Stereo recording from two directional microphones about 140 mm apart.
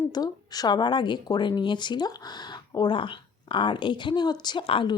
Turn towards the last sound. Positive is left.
turn(degrees=35)  # may be behind; listen again after turning